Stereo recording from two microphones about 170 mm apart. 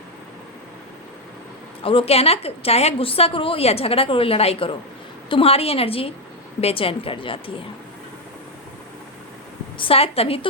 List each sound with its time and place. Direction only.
1.8 s a woman's voice: 30° left (ahead or behind)
9.7 s a woman's voice: 30° left (ahead or behind)